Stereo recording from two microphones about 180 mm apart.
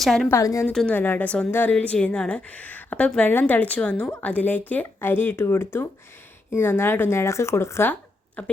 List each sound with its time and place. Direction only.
0.0 s a woman's voice: centre (ahead or behind)
0.3 s a woman's voice: 15° left (ahead or behind)
0.7 s a woman's voice: 5° left (ahead or behind)